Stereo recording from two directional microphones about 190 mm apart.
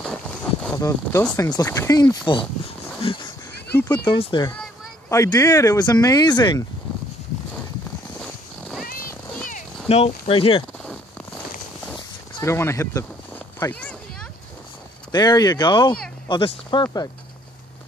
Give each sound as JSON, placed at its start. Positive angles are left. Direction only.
{"t": 0.0, "sound": "a sound", "side_deg": 5}
{"t": 0.7, "sound": "speech", "side_deg": 15}
{"t": 3.9, "sound": "speech", "side_deg": 25}
{"t": 9.5, "sound": "clip-clop", "side_deg": 35}
{"t": 12.4, "sound": "speech", "side_deg": 15}
{"t": 15.0, "sound": "speech", "side_deg": 20}